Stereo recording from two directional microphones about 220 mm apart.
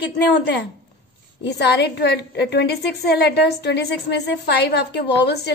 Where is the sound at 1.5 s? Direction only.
50° left (ahead or behind).